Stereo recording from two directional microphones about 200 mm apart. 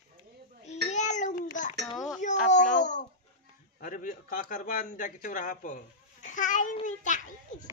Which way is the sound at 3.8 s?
45° left (ahead or behind).